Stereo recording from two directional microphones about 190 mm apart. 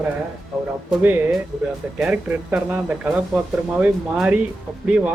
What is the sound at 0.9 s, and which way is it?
Speech, 5° right (ahead or behind).